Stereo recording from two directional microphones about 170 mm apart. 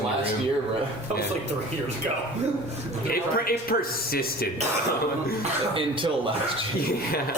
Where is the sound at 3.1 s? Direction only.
60° left (ahead or behind).